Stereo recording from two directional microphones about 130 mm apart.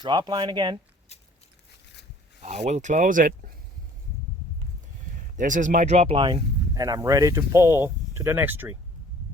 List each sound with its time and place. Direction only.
0.0 s speech: 35° right (ahead or behind)
2.4 s speech: 60° right (ahead or behind); by 3.5 s 90° right
5.4 s speech: 75° right (ahead or behind)
6.1 s speech: 40° right (ahead or behind)
6.7 s speech: 25° right (ahead or behind)